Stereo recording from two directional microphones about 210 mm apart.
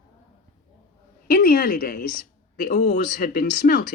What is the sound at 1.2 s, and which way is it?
Speech, 45° left (ahead or behind).